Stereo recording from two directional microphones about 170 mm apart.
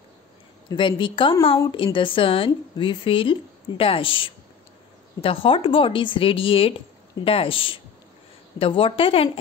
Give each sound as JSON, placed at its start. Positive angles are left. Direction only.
{"t": 0.7, "sound": "a woman's voice", "side_deg": 30}